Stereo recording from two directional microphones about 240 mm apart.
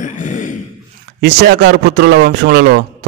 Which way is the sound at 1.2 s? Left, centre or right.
Right.